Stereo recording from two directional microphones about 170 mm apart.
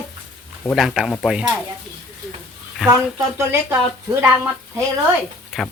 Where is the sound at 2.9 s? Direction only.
15° right (ahead or behind).